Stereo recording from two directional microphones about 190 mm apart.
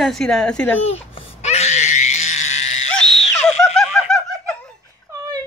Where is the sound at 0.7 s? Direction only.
35° left (ahead or behind).